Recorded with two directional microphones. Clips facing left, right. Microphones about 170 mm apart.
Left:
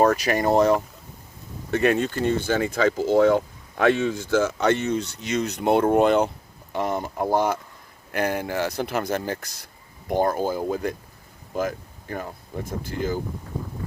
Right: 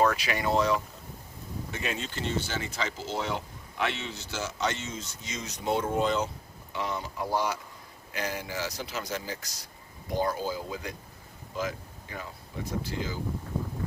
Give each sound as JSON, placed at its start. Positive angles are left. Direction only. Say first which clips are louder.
{"t": 0.0, "sound": "speech", "louder": "left 7 dB", "side_deg": 45}
{"t": 1.7, "sound": "speech", "louder": "left 15 dB", "side_deg": 60}
{"t": 6.7, "sound": "speech", "louder": "left 8 dB", "side_deg": 50}